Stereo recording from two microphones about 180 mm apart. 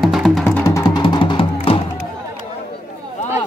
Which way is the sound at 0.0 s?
Centre (ahead or behind).